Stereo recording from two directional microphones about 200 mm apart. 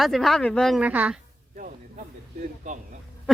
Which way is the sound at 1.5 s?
40° right (ahead or behind).